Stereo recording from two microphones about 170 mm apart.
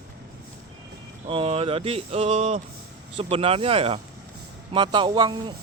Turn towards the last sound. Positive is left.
turn(degrees=-25)  # may be behind; listen again after turning